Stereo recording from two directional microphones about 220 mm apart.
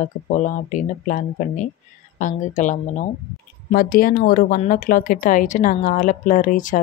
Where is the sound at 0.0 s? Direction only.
35° left (ahead or behind).